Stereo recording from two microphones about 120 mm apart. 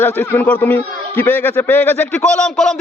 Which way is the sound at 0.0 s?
15° left (ahead or behind).